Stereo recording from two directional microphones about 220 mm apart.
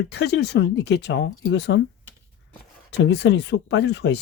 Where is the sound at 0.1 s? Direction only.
50° left (ahead or behind).